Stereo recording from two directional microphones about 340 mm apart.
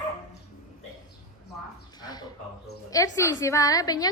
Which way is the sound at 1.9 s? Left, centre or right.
Centre.